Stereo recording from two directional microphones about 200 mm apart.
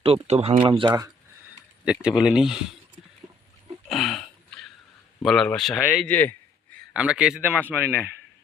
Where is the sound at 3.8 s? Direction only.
Centre (ahead or behind).